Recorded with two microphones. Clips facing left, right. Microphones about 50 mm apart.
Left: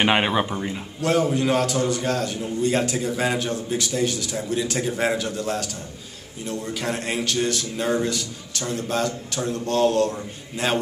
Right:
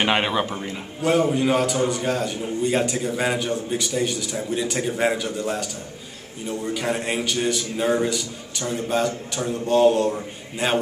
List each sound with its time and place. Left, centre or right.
0.0 s speech: centre
1.0 s a man's voice: centre